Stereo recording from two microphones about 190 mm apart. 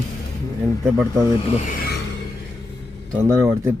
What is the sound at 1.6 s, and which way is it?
Music, 50° left (ahead or behind).